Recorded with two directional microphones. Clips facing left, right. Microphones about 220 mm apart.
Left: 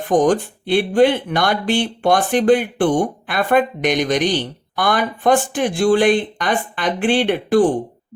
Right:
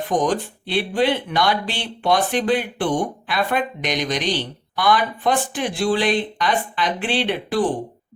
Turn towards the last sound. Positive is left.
turn(degrees=50)  # may be behind; listen again after turning